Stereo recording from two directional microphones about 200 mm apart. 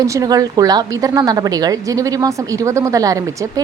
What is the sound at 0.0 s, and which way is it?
A woman's voice, 15° right (ahead or behind).